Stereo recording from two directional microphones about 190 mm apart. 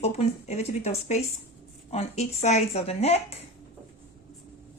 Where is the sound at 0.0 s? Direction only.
35° left (ahead or behind).